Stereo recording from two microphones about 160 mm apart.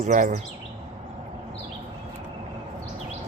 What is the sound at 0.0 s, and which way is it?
Speech, 50° right (ahead or behind).